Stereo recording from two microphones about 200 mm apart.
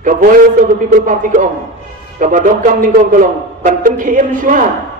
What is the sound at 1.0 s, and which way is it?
A man's voice, 40° right (ahead or behind).